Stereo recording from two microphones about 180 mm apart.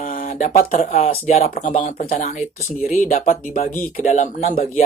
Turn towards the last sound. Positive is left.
turn(degrees=40)  # may be behind; listen again after turning